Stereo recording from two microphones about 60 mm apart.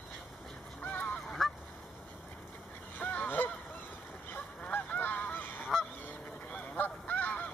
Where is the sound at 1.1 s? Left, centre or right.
Centre.